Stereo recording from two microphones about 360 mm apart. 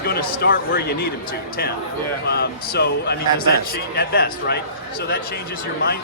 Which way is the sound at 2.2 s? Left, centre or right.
Left.